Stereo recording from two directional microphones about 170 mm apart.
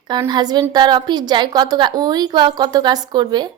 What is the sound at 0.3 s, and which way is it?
A woman's voice, 25° right (ahead or behind).